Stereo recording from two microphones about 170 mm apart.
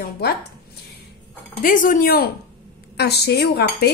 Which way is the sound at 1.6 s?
50° left (ahead or behind).